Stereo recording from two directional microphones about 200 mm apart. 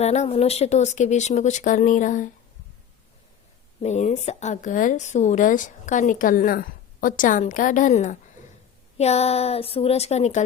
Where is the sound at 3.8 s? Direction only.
35° left (ahead or behind).